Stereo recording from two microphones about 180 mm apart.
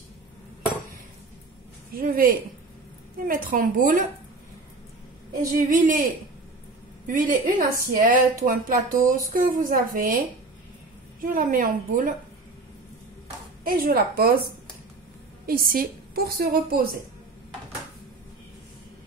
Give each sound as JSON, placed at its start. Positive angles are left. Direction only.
{"t": 2.0, "sound": "a woman's voice", "side_deg": -50}
{"t": 5.6, "sound": "a woman's voice", "side_deg": -50}
{"t": 13.7, "sound": "a woman's voice", "side_deg": -55}